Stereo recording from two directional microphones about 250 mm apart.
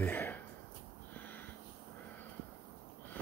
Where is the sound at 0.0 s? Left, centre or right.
Centre.